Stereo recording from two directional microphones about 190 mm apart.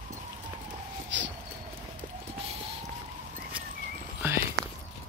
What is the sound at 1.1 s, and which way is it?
Speech, 70° right (ahead or behind).